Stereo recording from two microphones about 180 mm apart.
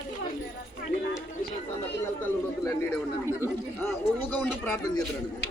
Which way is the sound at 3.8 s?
10° left (ahead or behind).